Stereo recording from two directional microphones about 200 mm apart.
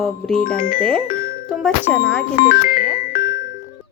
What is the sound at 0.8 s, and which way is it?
Speech, 5° left (ahead or behind).